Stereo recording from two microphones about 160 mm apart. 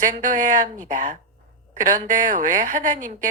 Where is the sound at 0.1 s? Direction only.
55° right (ahead or behind).